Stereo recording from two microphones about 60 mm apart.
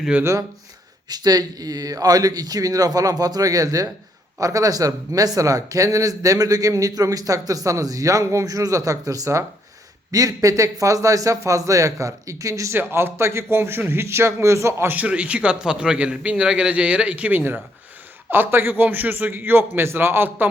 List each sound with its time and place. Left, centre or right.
1.1 s speech: right
8.4 s speech: right
12.7 s a man's voice: right
15.0 s a man's voice: right
18.3 s a man's voice: right